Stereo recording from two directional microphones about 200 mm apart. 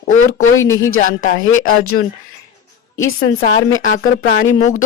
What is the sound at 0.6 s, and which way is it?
Speech, 80° left.